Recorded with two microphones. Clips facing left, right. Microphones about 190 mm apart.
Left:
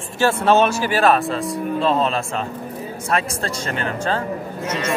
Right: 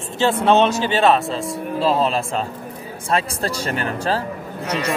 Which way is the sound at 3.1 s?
30° right (ahead or behind).